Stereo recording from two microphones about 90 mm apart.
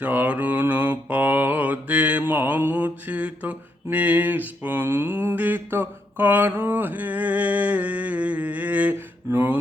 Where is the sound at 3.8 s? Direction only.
15° right (ahead or behind).